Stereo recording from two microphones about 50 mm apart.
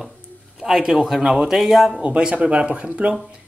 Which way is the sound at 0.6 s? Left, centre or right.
Centre.